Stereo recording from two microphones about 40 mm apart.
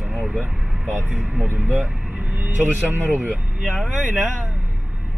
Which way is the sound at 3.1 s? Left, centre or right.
Right.